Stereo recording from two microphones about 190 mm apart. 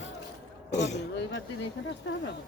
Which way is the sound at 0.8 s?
70° left (ahead or behind).